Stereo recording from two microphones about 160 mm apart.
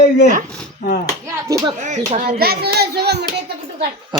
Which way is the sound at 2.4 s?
75° right (ahead or behind).